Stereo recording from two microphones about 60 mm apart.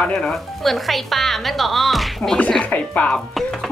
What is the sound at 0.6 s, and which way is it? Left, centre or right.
Speech, centre.